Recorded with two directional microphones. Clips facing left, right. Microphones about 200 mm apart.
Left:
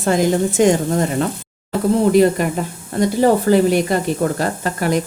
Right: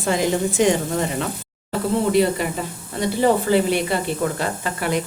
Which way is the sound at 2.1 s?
50° left (ahead or behind).